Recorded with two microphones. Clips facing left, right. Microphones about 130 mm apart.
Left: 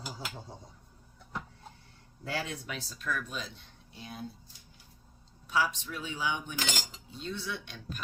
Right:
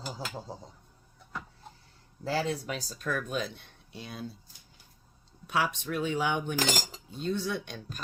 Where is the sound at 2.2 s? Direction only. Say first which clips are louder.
Right 6 dB; 30° right (ahead or behind); by 4.3 s 85° right.